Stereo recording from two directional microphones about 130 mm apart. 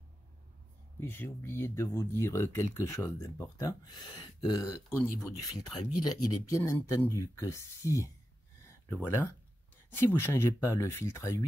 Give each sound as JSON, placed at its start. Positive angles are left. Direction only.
{"t": 0.9, "sound": "speech", "side_deg": 20}
{"t": 8.6, "sound": "a sound", "side_deg": 20}
{"t": 9.9, "sound": "speech", "side_deg": 20}